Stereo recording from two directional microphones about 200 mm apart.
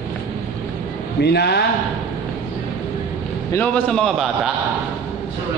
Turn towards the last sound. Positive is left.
turn(degrees=0)  # may be behind; listen again after turning